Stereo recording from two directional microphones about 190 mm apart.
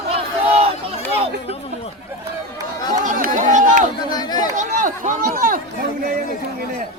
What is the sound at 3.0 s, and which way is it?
Chatter, 45° right (ahead or behind).